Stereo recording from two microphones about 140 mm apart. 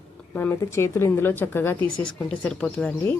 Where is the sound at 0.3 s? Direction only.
15° left (ahead or behind).